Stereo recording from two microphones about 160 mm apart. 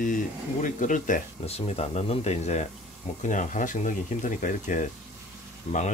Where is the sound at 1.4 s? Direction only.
40° left (ahead or behind).